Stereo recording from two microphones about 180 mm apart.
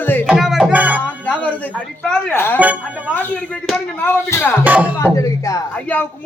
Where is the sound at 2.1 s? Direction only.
10° left (ahead or behind).